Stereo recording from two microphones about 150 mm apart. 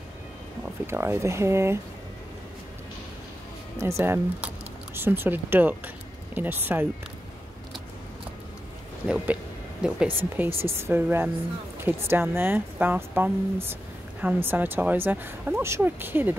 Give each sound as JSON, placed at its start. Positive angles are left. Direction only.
{"t": 0.8, "sound": "speech", "side_deg": -15}
{"t": 3.7, "sound": "speech", "side_deg": -15}
{"t": 9.0, "sound": "speech", "side_deg": -10}